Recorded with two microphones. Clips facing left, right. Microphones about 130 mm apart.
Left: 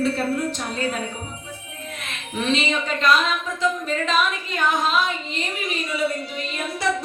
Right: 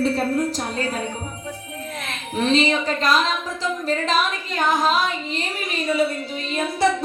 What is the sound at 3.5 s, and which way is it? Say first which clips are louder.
Music: even; 35° right (ahead or behind).